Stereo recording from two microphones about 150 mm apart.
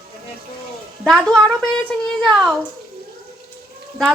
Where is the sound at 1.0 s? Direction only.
5° left (ahead or behind).